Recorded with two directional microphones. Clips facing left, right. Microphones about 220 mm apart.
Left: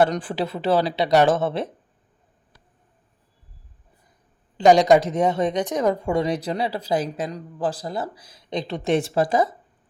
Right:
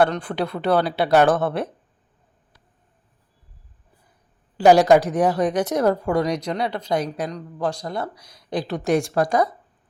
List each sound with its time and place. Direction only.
0.1 s speech: 5° left (ahead or behind)
4.5 s speech: 5° right (ahead or behind)
6.2 s speech: 30° left (ahead or behind)
6.7 s speech: 5° left (ahead or behind)